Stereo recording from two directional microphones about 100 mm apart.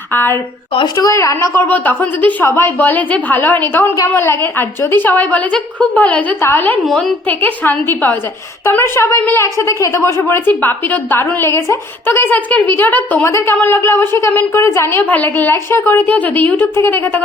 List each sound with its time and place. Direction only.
0.1 s a woman's voice: 20° left (ahead or behind)
0.9 s speech: 35° left (ahead or behind)
1.6 s a woman's voice: 20° left (ahead or behind)
6.8 s a woman's voice: 5° left (ahead or behind)
7.3 s a woman's voice: 20° left (ahead or behind)